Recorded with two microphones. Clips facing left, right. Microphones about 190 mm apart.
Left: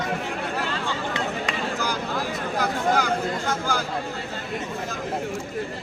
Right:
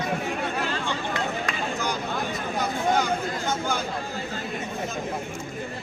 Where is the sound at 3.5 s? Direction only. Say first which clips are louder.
Right 2 dB; 20° right (ahead or behind).